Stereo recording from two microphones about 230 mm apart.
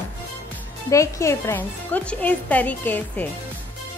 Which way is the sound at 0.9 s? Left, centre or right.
Centre.